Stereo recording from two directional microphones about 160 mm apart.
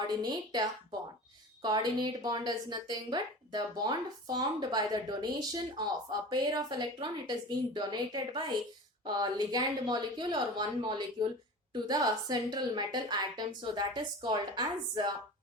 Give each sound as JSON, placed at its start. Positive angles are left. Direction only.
{"t": 0.1, "sound": "speech", "side_deg": -25}